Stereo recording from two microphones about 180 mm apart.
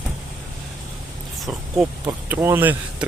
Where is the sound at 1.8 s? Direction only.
10° right (ahead or behind).